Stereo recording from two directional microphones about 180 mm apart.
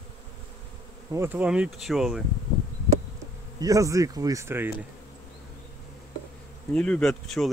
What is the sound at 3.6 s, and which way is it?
Speech, 20° right (ahead or behind).